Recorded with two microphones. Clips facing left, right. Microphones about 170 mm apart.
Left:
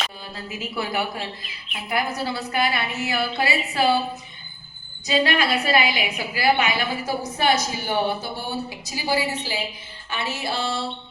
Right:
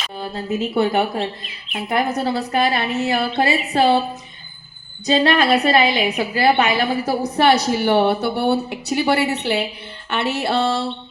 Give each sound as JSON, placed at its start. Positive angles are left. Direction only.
{"t": 0.2, "sound": "a woman's voice", "side_deg": -35}
{"t": 1.7, "sound": "a woman's voice", "side_deg": -45}
{"t": 2.2, "sound": "a woman's voice", "side_deg": -35}
{"t": 5.0, "sound": "a woman's voice", "side_deg": -35}
{"t": 6.1, "sound": "a woman's voice", "side_deg": -50}